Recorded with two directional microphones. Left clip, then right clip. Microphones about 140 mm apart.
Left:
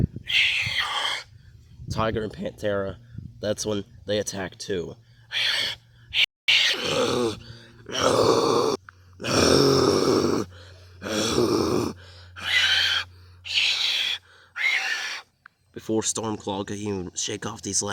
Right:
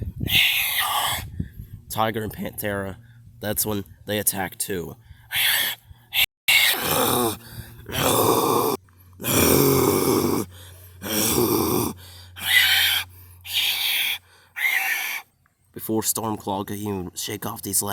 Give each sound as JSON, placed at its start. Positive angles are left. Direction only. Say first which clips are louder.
{"t": 0.3, "sound": "owl", "louder": "right 2 dB", "side_deg": -45}
{"t": 1.9, "sound": "speech", "louder": "right 2 dB", "side_deg": -40}
{"t": 3.4, "sound": "a sound", "louder": "left 1 dB", "side_deg": -50}
{"t": 13.5, "sound": "owl", "louder": "even", "side_deg": -30}
{"t": 15.7, "sound": "speech", "louder": "even", "side_deg": -35}